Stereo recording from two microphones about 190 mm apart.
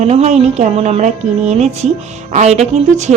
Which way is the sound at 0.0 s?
35° right (ahead or behind).